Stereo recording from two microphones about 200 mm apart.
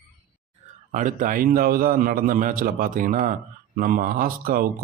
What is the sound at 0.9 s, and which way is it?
A man's voice, 40° right (ahead or behind).